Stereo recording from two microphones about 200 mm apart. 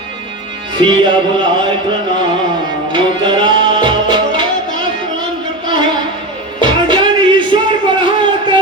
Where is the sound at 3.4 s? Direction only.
25° right (ahead or behind).